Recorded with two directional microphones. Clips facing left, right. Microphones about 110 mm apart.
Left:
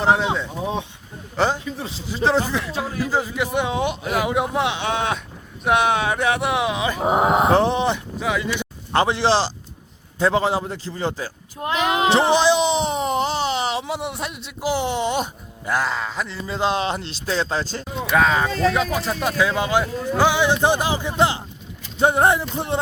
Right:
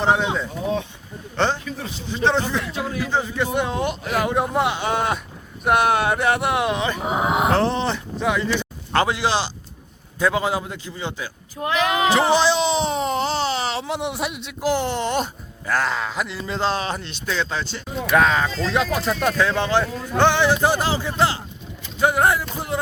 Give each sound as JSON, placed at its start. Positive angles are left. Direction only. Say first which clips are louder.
{"t": 0.0, "sound": "a man's voice", "louder": "left 1 dB", "side_deg": 0}
{"t": 1.6, "sound": "music", "louder": "left 1 dB", "side_deg": 25}
{"t": 2.2, "sound": "a man's voice", "louder": "left 1 dB", "side_deg": 0}
{"t": 7.5, "sound": "speech", "louder": "left 2 dB", "side_deg": 15}
{"t": 8.2, "sound": "a man's voice", "louder": "right 3 dB", "side_deg": 0}
{"t": 8.5, "sound": "a man's voice", "louder": "even", "side_deg": 20}
{"t": 11.7, "sound": "speech", "louder": "left 1 dB", "side_deg": 25}
{"t": 13.8, "sound": "a man's voice", "louder": "right 2 dB", "side_deg": 5}
{"t": 14.6, "sound": "a man's voice", "louder": "even", "side_deg": 10}
{"t": 16.6, "sound": "speech", "louder": "left 2 dB", "side_deg": 20}
{"t": 18.1, "sound": "a man's voice", "louder": "even", "side_deg": 0}
{"t": 21.9, "sound": "music", "louder": "left 1 dB", "side_deg": 25}